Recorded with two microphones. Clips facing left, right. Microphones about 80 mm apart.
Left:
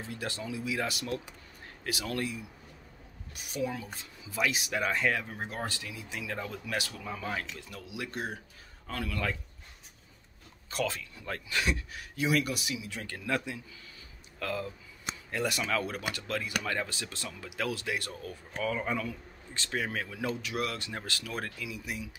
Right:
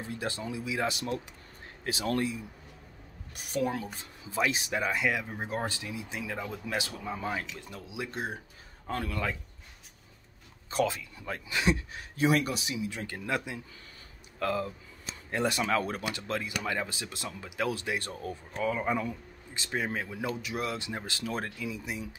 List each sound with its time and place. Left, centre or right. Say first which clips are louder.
0.1 s a man's voice: right 2 dB; right
3.3 s a woman's voice: right 3 dB; right
4.2 s a man's voice: right 2 dB; right
10.7 s a man's voice: right 4 dB; right
14.4 s a man's voice: right 4 dB; right
18.6 s a man's voice: right 2 dB; centre